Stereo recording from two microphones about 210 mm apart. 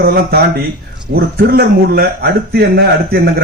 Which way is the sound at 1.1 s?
45° right (ahead or behind).